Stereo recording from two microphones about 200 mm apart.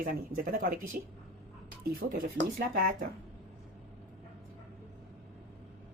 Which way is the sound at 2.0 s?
45° right (ahead or behind).